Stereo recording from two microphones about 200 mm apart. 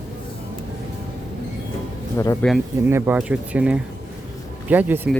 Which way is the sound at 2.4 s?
5° left (ahead or behind).